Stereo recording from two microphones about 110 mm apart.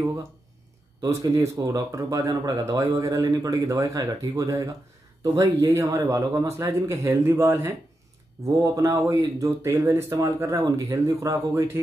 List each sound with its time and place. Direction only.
1.0 s speech: 30° right (ahead or behind)